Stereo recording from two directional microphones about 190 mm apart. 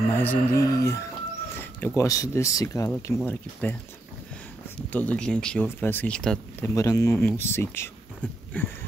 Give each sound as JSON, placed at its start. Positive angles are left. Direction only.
{"t": 0.2, "sound": "speech", "side_deg": 15}
{"t": 4.9, "sound": "speech", "side_deg": 5}
{"t": 6.7, "sound": "speech", "side_deg": 15}